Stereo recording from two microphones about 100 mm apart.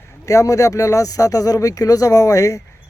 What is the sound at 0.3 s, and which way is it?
Speech, 35° left (ahead or behind).